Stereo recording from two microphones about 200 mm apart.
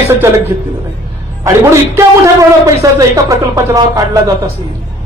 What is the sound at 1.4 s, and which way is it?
Speech, 15° right (ahead or behind).